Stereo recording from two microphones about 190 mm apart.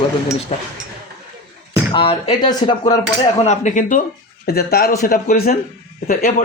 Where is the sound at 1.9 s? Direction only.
25° left (ahead or behind).